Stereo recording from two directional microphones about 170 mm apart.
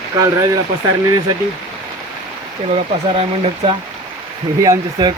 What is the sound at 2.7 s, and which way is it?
Speech, 35° right (ahead or behind).